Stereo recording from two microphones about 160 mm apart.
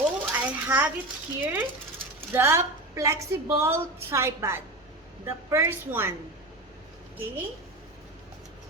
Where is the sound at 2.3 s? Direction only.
15° right (ahead or behind).